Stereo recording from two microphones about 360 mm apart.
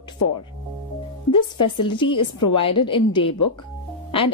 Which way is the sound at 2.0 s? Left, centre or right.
Centre.